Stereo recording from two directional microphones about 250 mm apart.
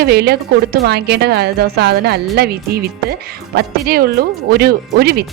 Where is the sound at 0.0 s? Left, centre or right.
Right.